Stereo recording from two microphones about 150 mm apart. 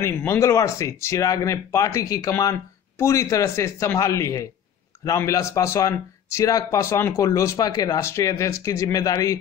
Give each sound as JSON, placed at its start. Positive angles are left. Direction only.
{"t": 0.0, "sound": "speech", "side_deg": 20}